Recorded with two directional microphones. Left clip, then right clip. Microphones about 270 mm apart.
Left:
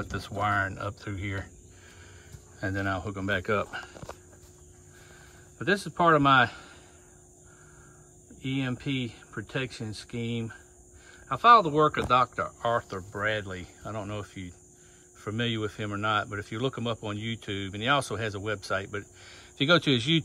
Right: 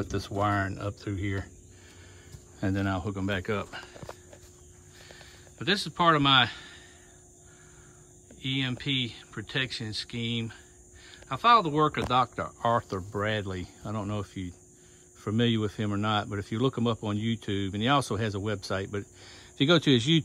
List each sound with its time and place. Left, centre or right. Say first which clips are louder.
0.1 s speech: left 1 dB; right
2.6 s speech: even; centre
5.6 s speech: left 1 dB; centre
8.4 s speech: right 2 dB; centre